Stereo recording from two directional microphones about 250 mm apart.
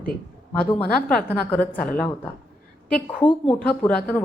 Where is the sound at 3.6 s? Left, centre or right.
Centre.